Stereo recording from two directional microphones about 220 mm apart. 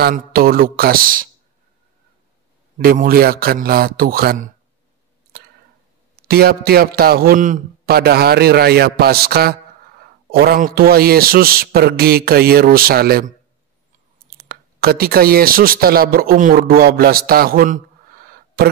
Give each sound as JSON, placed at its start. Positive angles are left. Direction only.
{"t": 0.0, "sound": "speech", "side_deg": -40}
{"t": 2.8, "sound": "a man's voice", "side_deg": -40}
{"t": 5.3, "sound": "a sound", "side_deg": -45}
{"t": 6.2, "sound": "a man's voice", "side_deg": -45}
{"t": 14.3, "sound": "a man's voice", "side_deg": -45}